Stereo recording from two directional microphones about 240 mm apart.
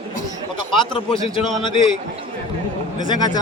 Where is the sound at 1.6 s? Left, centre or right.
Centre.